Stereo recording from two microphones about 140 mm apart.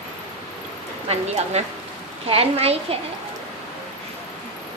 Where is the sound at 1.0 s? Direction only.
50° right (ahead or behind).